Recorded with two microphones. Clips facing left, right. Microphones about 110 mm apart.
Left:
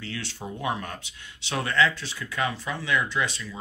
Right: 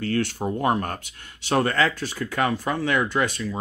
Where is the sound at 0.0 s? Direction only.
50° right (ahead or behind).